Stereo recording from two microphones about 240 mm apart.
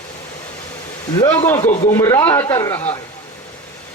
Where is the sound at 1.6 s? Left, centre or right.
Left.